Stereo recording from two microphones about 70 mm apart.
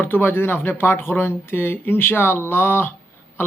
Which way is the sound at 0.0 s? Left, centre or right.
Left.